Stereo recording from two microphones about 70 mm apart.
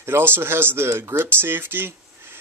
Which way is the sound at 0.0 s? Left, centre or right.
Right.